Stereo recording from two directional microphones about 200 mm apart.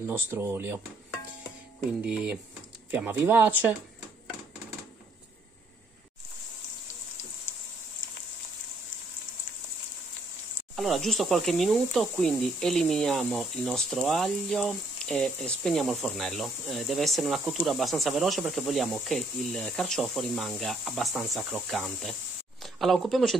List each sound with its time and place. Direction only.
0.0 s speech: 10° right (ahead or behind)
2.9 s speech: 10° right (ahead or behind)
10.8 s speech: centre (ahead or behind)